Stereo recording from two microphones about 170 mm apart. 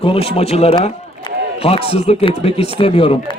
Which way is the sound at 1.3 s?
25° left (ahead or behind).